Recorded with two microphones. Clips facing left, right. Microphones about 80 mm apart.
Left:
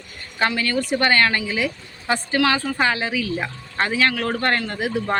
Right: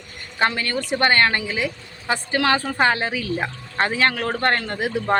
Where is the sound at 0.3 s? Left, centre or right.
Right.